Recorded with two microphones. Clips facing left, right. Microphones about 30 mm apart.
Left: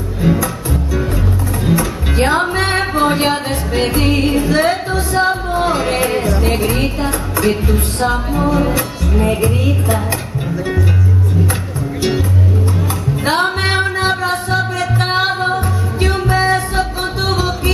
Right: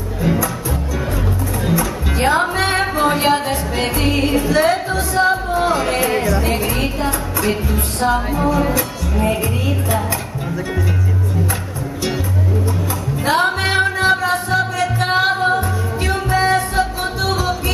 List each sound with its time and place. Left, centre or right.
1.7 s music: centre
13.2 s music: centre